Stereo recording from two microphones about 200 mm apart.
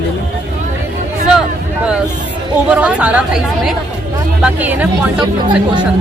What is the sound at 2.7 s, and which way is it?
Speech, 5° right (ahead or behind).